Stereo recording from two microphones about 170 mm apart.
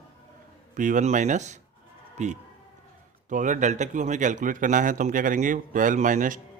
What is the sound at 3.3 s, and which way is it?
Speech, 45° right (ahead or behind).